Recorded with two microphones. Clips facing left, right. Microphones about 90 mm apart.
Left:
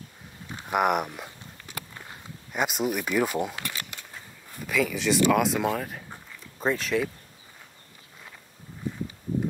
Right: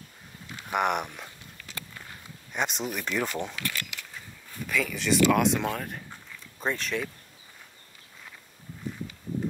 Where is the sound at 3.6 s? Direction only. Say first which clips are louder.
Right 1 dB; 25° left (ahead or behind).